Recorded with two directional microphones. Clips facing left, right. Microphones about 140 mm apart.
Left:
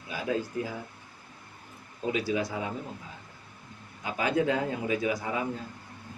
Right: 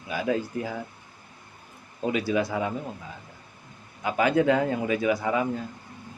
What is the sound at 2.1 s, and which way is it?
Speech, 65° right (ahead or behind).